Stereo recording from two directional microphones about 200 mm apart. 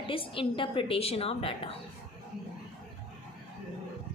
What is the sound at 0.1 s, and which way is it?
A woman's voice, 25° left (ahead or behind).